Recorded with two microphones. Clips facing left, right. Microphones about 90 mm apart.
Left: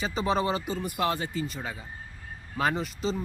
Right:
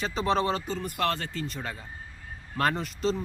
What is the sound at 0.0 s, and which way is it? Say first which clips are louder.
Speech: right 1 dB; 5° left (ahead or behind).